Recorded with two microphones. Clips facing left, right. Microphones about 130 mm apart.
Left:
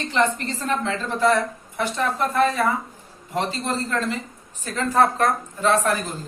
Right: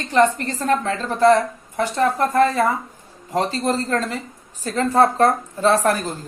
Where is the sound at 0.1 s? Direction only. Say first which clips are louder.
Right 6 dB; 45° right (ahead or behind).